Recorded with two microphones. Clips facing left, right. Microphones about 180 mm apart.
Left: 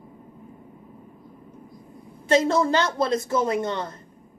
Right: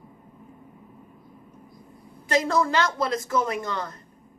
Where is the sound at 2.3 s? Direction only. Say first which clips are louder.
Left 3 dB; 25° left (ahead or behind).